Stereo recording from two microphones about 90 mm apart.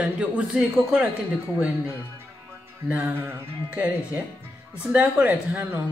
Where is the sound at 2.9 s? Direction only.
15° right (ahead or behind).